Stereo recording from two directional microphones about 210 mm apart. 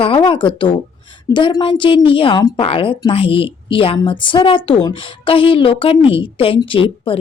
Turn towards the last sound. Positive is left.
turn(degrees=25)  # may be behind; listen again after turning